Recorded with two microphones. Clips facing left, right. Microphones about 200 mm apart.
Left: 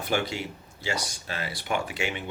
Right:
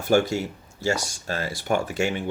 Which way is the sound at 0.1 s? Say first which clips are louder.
Right 8 dB; 45° right (ahead or behind).